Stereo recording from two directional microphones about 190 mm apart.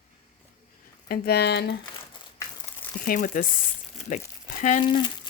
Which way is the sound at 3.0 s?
45° left (ahead or behind).